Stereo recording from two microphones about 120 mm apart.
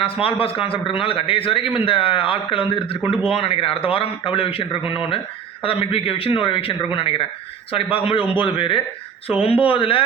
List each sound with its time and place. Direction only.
0.0 s a man's voice: 50° left (ahead or behind)